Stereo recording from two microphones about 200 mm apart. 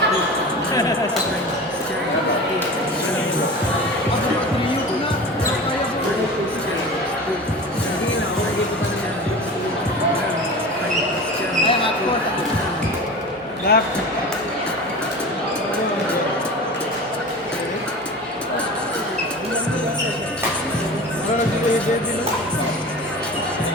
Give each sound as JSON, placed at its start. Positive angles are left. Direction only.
{"t": 13.7, "sound": "basketball bounce", "side_deg": 50}